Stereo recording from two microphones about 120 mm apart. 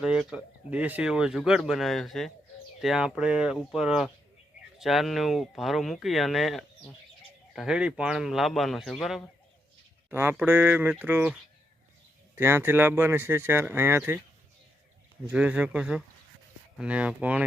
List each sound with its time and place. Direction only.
0.0 s speech: 5° right (ahead or behind)
10.1 s speech: 20° right (ahead or behind)
12.4 s speech: 20° right (ahead or behind)
15.3 s speech: 10° right (ahead or behind)